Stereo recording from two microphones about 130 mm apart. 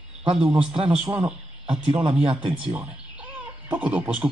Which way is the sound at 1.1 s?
10° right (ahead or behind).